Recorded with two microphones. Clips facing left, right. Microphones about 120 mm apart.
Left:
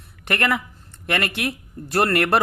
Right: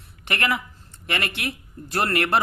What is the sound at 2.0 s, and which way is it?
Speech, 60° left (ahead or behind).